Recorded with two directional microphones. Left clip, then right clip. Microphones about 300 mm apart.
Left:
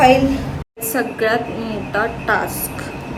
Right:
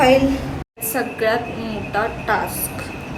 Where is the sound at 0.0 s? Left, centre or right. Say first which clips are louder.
Left 2 dB; centre.